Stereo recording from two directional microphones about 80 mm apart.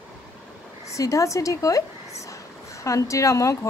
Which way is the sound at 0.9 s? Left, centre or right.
Left.